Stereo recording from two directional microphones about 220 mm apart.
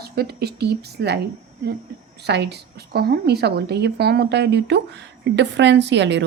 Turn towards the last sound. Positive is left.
turn(degrees=-55)  # may be behind; listen again after turning